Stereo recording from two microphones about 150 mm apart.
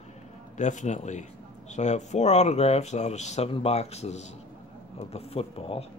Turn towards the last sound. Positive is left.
turn(degrees=40)  # may be behind; listen again after turning